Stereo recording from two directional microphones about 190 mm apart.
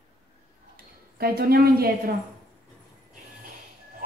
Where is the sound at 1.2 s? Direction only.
50° right (ahead or behind).